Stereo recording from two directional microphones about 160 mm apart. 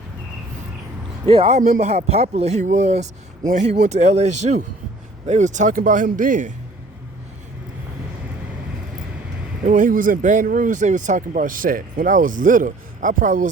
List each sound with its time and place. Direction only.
1.2 s a man's voice: 35° right (ahead or behind); by 6.5 s 55° right (ahead or behind)
9.6 s speech: 55° right (ahead or behind)